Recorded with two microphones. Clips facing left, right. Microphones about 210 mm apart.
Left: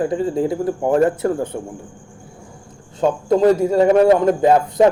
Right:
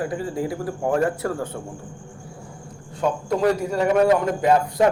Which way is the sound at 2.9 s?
25° left (ahead or behind).